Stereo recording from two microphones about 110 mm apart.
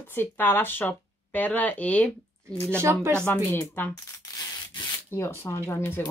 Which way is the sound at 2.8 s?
25° right (ahead or behind).